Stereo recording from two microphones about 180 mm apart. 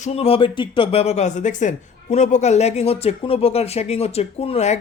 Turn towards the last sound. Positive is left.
turn(degrees=35)  # may be behind; listen again after turning